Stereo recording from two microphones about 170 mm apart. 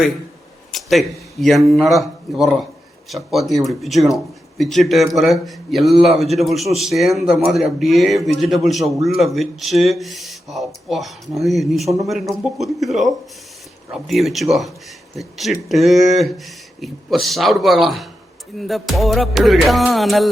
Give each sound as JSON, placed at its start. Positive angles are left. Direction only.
{"t": 0.7, "sound": "a man's voice", "side_deg": 0}